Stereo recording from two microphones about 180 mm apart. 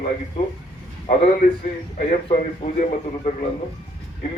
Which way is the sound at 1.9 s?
45° left (ahead or behind).